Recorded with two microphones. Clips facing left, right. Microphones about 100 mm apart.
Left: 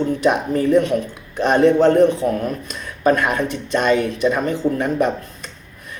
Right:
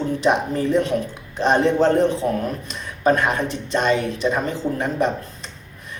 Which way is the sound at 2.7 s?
25° right (ahead or behind).